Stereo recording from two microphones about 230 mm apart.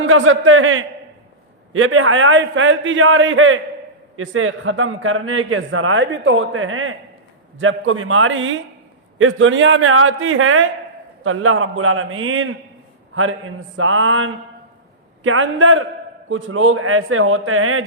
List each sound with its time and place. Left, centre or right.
0.0 s a man's voice: right